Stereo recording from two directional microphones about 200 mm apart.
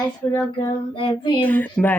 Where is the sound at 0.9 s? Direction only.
25° left (ahead or behind).